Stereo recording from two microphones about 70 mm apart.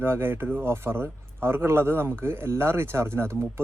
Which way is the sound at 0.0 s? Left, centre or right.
Right.